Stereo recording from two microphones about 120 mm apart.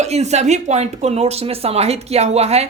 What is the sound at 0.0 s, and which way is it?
Speech, 70° right (ahead or behind).